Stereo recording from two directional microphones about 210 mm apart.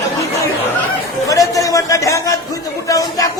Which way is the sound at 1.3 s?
15° left (ahead or behind).